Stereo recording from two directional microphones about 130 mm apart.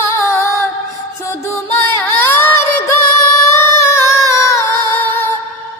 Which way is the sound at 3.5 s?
20° left (ahead or behind).